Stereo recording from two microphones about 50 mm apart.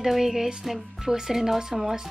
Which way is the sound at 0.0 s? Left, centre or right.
Centre.